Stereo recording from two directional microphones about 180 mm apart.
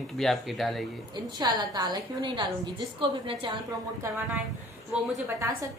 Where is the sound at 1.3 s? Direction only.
25° right (ahead or behind).